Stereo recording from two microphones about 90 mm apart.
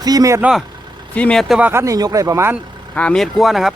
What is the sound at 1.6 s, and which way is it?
Speech, 25° right (ahead or behind).